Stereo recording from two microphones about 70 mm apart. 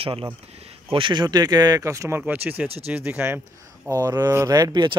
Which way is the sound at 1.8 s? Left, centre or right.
Right.